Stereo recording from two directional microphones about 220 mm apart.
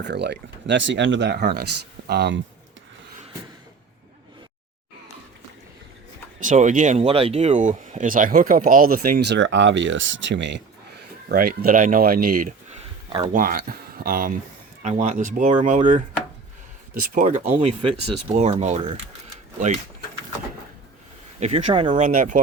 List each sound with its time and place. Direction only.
0.0 s speech: 50° right (ahead or behind)
6.4 s speech: 35° right (ahead or behind); by 10.6 s 55° right (ahead or behind)
11.3 s speech: 40° right (ahead or behind)
21.3 s speech: 30° right (ahead or behind)
22.0 s speech: 35° right (ahead or behind)